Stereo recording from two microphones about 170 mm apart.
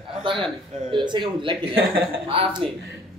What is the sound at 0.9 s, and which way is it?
A man's voice, 30° right (ahead or behind).